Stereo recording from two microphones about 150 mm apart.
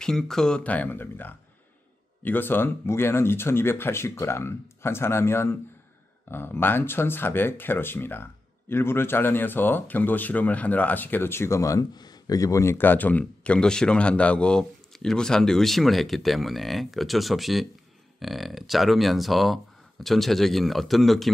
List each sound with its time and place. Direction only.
0.0 s speech: 5° left (ahead or behind)